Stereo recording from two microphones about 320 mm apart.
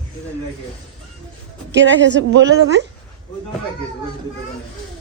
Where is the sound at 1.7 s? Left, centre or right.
Right.